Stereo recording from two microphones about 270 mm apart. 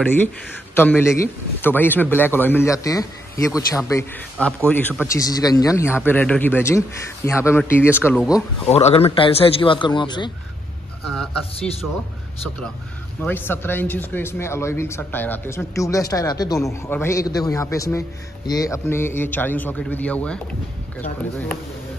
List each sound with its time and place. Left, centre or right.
0.7 s a man's voice: centre
8.7 s a man's voice: left
13.2 s a man's voice: centre